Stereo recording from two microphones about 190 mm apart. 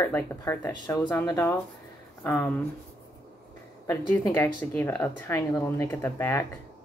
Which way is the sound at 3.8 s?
15° left (ahead or behind).